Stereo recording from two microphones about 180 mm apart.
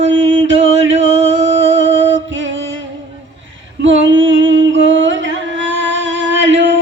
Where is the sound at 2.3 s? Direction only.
90° right.